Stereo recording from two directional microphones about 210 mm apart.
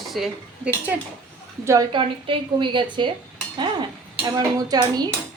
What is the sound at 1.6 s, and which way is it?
A woman's voice, 20° right (ahead or behind).